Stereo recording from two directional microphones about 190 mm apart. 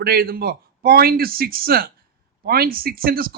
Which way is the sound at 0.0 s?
55° right (ahead or behind).